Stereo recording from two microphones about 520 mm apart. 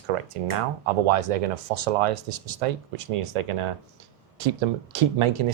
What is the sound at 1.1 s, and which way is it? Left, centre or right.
Speech, right.